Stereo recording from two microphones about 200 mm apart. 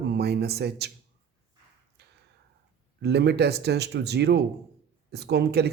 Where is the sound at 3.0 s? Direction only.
55° right (ahead or behind).